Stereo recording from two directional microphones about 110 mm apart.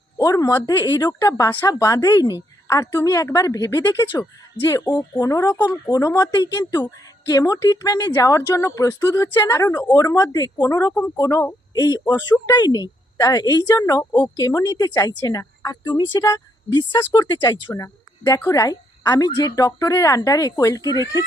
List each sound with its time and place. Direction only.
0.2 s a woman's voice: 30° left (ahead or behind)
4.5 s speech: 25° left (ahead or behind)